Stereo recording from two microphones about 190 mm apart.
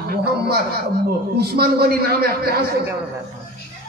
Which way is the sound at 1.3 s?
55° right (ahead or behind).